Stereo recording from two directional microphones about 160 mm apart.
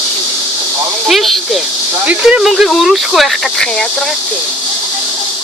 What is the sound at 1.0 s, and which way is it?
Speech, centre (ahead or behind).